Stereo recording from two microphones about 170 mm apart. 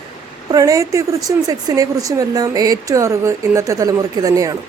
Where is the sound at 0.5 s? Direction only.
20° right (ahead or behind).